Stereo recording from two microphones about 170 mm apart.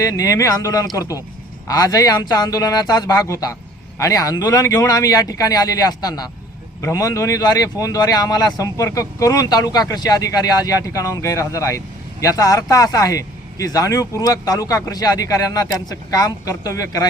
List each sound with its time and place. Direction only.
0.0 s speech: 20° left (ahead or behind)